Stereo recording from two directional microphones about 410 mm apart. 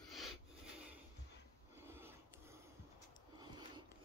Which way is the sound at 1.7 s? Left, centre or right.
Centre.